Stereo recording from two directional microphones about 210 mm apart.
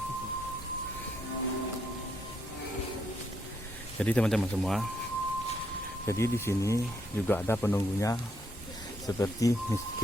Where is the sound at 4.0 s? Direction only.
5° left (ahead or behind).